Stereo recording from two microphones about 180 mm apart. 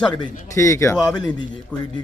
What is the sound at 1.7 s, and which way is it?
Speech, 5° left (ahead or behind).